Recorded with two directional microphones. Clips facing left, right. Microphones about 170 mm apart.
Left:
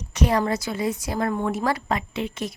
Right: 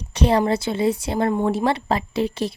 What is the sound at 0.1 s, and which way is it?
A woman's voice, 30° right (ahead or behind).